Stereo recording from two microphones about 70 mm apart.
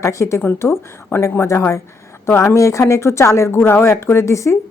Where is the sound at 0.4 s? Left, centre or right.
Left.